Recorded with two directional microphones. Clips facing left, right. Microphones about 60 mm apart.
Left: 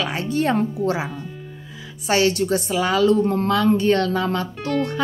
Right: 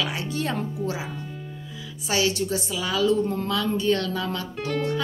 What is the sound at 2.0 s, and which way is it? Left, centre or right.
A woman's voice, left.